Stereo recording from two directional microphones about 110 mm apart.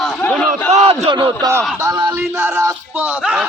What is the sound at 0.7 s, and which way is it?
Speech, 65° right (ahead or behind).